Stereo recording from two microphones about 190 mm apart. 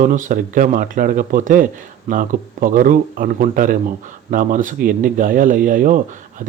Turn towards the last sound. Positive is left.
turn(degrees=-45)  # may be behind; listen again after turning